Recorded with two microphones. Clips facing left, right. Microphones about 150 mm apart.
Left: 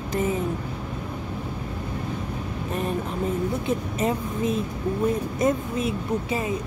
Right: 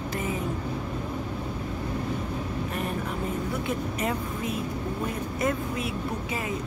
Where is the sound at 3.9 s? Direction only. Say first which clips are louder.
Left 4 dB; 25° left (ahead or behind).